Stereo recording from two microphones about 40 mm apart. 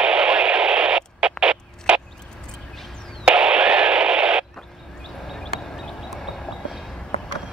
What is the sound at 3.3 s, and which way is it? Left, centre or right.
Radio, right.